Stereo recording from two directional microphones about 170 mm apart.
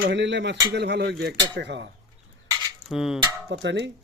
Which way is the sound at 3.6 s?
90° right.